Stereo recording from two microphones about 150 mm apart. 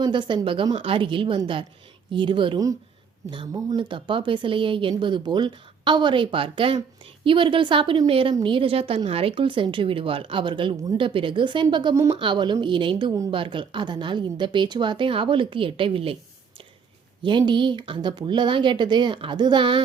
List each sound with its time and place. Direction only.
0.0 s a woman's voice: 30° right (ahead or behind)
17.2 s a woman's voice: 30° right (ahead or behind)